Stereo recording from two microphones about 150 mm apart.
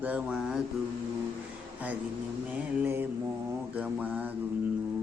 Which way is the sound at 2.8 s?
15° right (ahead or behind).